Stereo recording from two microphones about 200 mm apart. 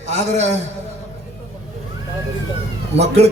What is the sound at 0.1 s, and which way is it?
Speech, 35° right (ahead or behind).